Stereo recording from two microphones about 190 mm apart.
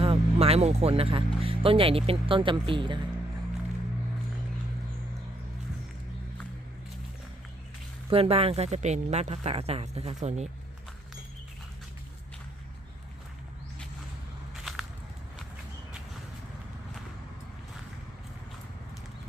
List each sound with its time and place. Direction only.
0.0 s speech: 30° right (ahead or behind)
8.1 s speech: 30° right (ahead or behind)
14.5 s a sound: centre (ahead or behind)